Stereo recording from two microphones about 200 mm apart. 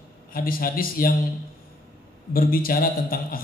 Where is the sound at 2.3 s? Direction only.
45° left (ahead or behind).